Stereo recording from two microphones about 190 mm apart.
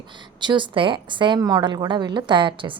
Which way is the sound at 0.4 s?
25° right (ahead or behind).